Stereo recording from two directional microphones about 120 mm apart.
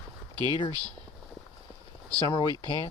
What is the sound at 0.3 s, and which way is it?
Speech, 35° right (ahead or behind).